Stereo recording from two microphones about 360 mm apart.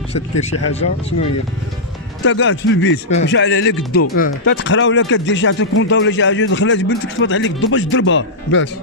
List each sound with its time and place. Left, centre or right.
0.4 s speech: centre
2.2 s speech: left